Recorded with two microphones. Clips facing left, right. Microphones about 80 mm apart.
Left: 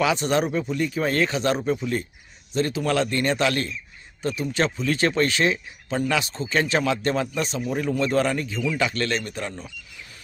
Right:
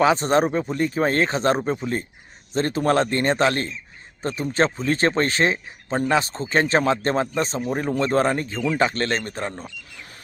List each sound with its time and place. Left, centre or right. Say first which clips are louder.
0.0 s speech: right 4 dB; right